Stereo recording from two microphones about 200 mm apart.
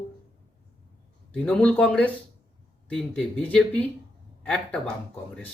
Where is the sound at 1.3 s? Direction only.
5° left (ahead or behind).